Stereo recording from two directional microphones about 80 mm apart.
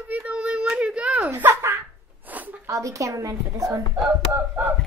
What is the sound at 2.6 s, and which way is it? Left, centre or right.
A woman's voice, right.